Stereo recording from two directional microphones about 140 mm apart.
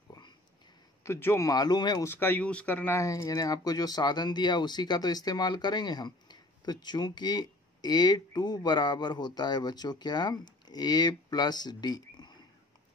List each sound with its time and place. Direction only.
0.1 s a sound: 30° left (ahead or behind)
1.0 s speech: 20° left (ahead or behind)
2.0 s speech: 15° left (ahead or behind)